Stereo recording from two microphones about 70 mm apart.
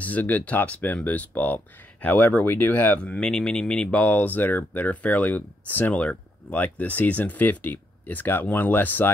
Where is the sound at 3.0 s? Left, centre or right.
Centre.